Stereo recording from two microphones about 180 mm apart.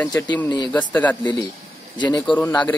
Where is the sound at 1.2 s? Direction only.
25° left (ahead or behind).